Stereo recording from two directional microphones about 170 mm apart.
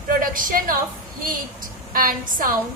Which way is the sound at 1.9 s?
55° right (ahead or behind).